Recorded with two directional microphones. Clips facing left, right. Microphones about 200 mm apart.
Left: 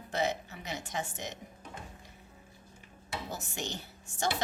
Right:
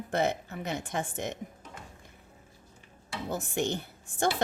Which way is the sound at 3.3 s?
55° right (ahead or behind).